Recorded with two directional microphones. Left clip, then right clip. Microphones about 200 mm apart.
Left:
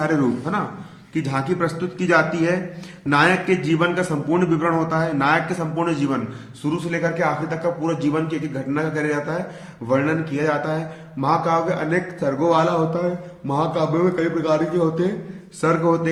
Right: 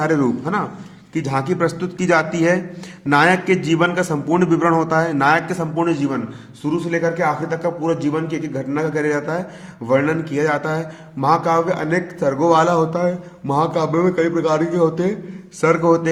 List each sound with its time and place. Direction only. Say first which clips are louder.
0.0 s a man's voice: right 3 dB; 40° right (ahead or behind)